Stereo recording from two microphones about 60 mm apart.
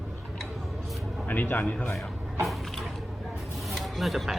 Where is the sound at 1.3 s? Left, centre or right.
Left.